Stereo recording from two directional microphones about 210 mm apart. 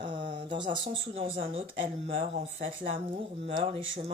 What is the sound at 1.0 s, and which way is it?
Speech, 30° right (ahead or behind).